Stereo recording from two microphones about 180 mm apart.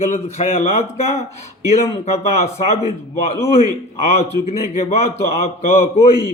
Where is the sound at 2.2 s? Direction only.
40° left (ahead or behind).